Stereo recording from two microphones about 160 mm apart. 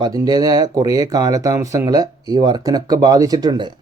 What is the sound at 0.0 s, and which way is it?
Speech, 25° right (ahead or behind).